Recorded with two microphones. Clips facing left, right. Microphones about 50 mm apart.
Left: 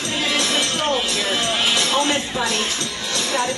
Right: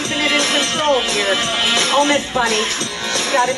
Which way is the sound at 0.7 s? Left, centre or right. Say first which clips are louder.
Right 5 dB; right.